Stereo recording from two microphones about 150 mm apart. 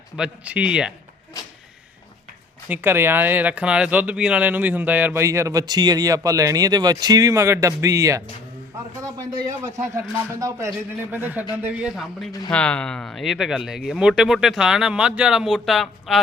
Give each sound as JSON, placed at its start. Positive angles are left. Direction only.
{"t": 0.2, "sound": "speech", "side_deg": -10}
{"t": 2.6, "sound": "a man's voice", "side_deg": -10}
{"t": 11.1, "sound": "speech", "side_deg": -10}